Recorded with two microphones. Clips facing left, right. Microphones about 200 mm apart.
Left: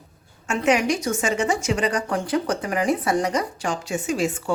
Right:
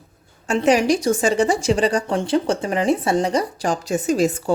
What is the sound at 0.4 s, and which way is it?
Speech, 35° right (ahead or behind).